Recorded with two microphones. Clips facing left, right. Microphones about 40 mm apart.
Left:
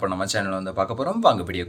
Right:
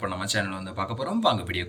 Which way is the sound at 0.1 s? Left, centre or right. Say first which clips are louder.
Left 4 dB; right.